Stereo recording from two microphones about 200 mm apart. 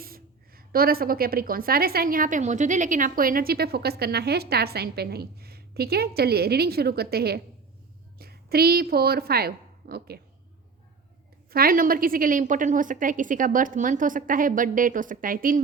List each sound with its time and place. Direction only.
0.0 s a woman's voice: 45° right (ahead or behind)
11.5 s a woman's voice: 45° right (ahead or behind)